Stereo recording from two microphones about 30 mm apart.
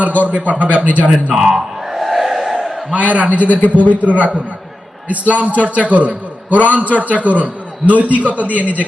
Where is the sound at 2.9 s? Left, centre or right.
Right.